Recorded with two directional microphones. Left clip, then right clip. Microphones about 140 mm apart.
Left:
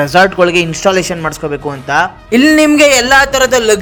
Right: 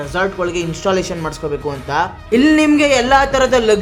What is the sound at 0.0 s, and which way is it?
A man's voice, 45° left (ahead or behind).